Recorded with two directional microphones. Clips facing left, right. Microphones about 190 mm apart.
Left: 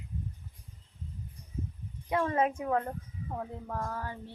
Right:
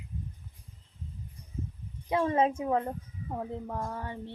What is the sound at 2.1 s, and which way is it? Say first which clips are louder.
Speech: right 2 dB; 25° right (ahead or behind).